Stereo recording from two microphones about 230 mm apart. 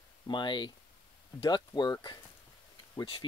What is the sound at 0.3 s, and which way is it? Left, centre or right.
Speech, centre.